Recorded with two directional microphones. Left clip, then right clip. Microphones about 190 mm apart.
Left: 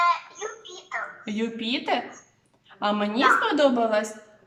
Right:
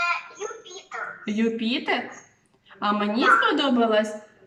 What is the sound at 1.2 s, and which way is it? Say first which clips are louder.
A woman's voice: right 4 dB; 15° left (ahead or behind).